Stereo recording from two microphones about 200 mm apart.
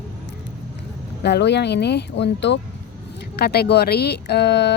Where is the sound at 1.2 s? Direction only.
60° left (ahead or behind).